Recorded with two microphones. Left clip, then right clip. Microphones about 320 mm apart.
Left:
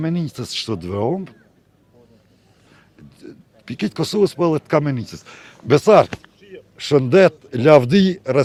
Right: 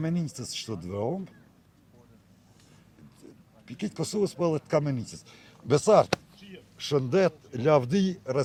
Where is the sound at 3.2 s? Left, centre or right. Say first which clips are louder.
Left 14 dB; left.